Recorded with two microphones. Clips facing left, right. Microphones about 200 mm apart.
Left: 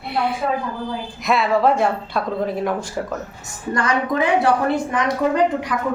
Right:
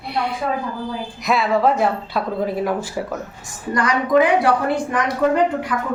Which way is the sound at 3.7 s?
25° left (ahead or behind).